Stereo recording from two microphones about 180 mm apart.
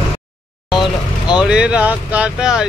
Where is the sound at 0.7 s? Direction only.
5° right (ahead or behind).